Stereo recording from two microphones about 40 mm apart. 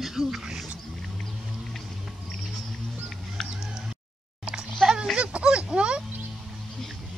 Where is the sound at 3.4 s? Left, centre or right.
Centre.